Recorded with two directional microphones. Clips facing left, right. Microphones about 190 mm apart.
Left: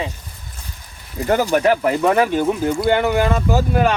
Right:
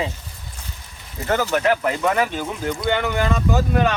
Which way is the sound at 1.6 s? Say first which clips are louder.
Left 4 dB; 40° left (ahead or behind).